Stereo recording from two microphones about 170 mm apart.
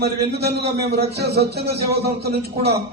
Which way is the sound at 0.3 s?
75° right (ahead or behind).